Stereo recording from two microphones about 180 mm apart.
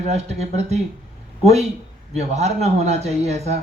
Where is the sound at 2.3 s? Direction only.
40° right (ahead or behind).